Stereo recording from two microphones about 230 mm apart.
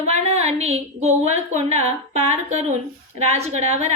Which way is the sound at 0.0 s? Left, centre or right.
Right.